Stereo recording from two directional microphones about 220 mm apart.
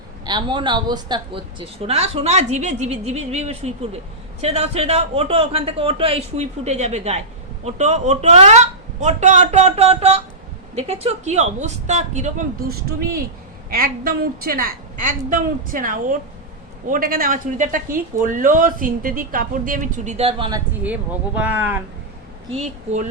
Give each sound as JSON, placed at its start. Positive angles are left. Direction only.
{"t": 0.3, "sound": "speech", "side_deg": -20}
{"t": 20.8, "sound": "speech", "side_deg": -5}
{"t": 22.5, "sound": "speech", "side_deg": -30}